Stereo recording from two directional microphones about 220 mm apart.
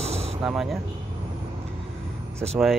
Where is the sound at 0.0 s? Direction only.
30° right (ahead or behind).